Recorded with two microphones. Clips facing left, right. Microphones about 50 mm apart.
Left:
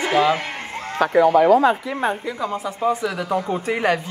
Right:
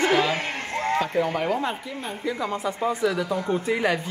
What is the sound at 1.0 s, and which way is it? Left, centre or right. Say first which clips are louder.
Speech: left 8 dB; left.